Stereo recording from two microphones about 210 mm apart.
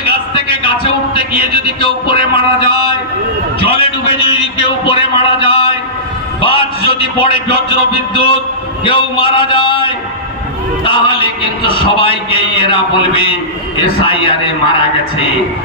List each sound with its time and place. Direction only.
0.3 s a man's voice: 25° left (ahead or behind)
3.6 s a sound: 25° left (ahead or behind)
6.4 s a man's voice: 25° left (ahead or behind)